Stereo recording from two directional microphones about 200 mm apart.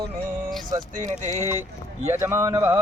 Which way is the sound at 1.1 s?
35° right (ahead or behind).